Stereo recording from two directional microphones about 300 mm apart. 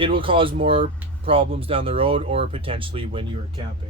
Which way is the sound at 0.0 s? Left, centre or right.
Centre.